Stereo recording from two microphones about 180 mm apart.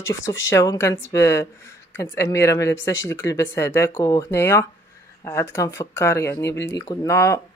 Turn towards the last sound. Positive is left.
turn(degrees=15)  # may be behind; listen again after turning